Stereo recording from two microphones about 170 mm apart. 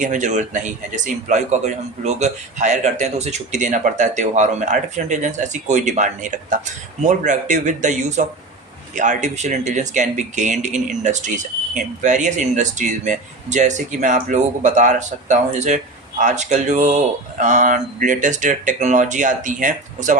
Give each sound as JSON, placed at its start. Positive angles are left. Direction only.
{"t": 0.0, "sound": "speech", "side_deg": -45}